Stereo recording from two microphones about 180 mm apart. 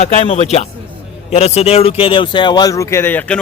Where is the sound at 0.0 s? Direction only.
40° left (ahead or behind).